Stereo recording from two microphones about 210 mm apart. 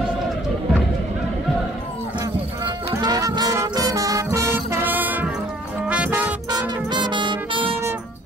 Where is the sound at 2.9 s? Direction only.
15° right (ahead or behind).